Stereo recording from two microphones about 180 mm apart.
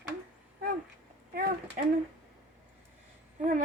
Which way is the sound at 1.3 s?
55° right (ahead or behind).